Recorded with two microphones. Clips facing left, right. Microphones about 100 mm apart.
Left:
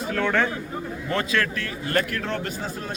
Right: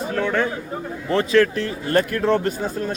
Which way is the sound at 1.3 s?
30° right (ahead or behind).